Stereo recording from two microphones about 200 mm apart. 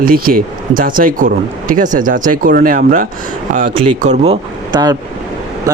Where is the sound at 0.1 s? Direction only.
45° right (ahead or behind).